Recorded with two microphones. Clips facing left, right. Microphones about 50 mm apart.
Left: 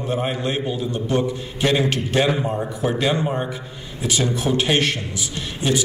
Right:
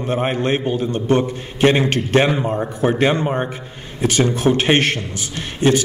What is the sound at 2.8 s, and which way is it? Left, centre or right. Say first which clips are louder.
A man's voice: right 4 dB; right.